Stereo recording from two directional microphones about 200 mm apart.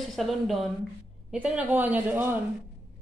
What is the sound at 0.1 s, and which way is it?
A woman's voice, centre (ahead or behind).